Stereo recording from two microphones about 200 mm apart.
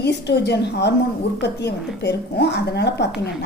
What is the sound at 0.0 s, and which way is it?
A woman's voice, 60° left (ahead or behind).